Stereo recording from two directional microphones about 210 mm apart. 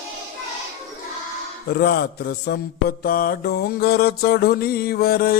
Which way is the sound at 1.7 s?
50° left (ahead or behind).